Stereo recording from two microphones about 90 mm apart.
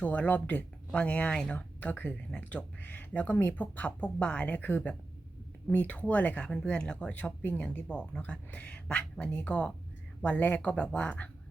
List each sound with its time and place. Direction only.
0.0 s speech: 15° left (ahead or behind)